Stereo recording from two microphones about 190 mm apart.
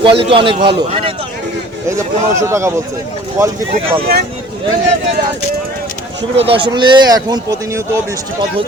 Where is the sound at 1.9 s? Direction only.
15° right (ahead or behind).